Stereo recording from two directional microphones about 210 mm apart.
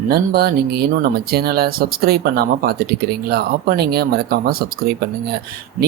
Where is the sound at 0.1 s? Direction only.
50° right (ahead or behind).